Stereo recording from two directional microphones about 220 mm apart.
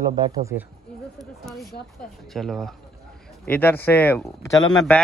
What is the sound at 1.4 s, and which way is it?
A man's voice, centre (ahead or behind).